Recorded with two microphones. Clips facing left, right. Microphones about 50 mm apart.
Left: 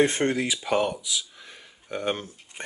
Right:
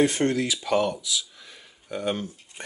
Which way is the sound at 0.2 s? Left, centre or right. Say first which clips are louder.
Right 1 dB; centre.